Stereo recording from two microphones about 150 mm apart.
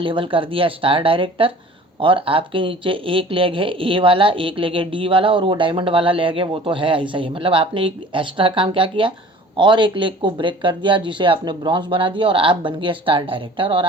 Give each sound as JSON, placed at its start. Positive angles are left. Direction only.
{"t": 0.0, "sound": "speech", "side_deg": -35}